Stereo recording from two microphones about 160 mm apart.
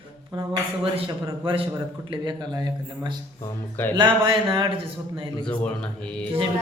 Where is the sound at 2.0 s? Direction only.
30° right (ahead or behind).